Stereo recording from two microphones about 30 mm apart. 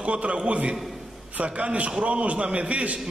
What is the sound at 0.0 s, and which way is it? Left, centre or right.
A man's voice, right.